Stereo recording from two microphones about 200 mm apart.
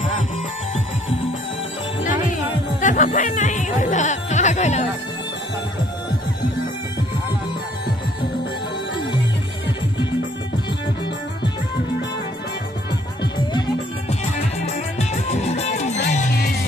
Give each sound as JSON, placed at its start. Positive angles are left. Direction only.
{"t": 2.8, "sound": "speech", "side_deg": 40}
{"t": 14.7, "sound": "music", "side_deg": 35}